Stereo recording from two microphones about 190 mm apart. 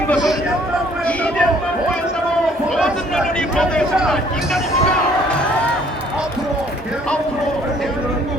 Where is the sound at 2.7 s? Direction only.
Centre (ahead or behind).